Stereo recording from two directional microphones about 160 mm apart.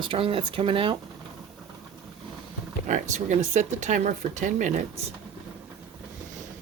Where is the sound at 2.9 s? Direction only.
50° right (ahead or behind).